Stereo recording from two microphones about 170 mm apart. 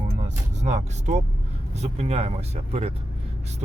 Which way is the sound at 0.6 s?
40° right (ahead or behind).